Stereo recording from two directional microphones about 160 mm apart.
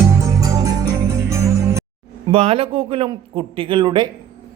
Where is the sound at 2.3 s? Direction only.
35° right (ahead or behind).